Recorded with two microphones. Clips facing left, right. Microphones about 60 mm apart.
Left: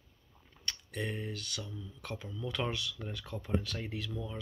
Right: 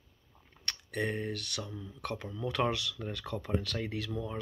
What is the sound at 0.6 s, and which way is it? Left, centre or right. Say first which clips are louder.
Speech: right 4 dB; right.